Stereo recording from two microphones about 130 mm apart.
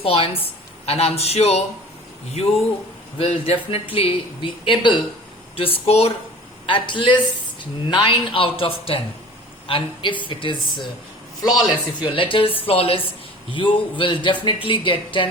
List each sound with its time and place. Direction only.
0.0 s speech: 50° left (ahead or behind)
3.2 s speech: 50° left (ahead or behind)
6.7 s speech: 40° left (ahead or behind)